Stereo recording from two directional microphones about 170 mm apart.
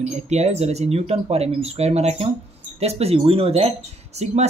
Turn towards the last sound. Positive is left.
turn(degrees=-40)  # may be behind; listen again after turning